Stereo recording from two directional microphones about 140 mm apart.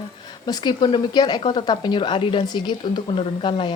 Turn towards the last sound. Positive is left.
turn(degrees=35)  # may be behind; listen again after turning